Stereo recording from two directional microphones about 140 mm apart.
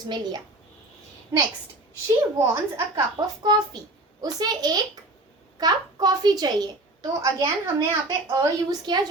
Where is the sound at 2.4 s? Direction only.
20° right (ahead or behind).